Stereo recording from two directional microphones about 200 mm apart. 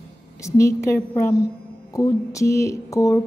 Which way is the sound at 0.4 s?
15° left (ahead or behind).